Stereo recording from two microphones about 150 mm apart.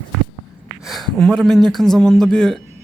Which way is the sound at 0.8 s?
Centre (ahead or behind).